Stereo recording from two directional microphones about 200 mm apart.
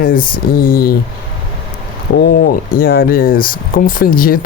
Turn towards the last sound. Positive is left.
turn(degrees=45)  # may be behind; listen again after turning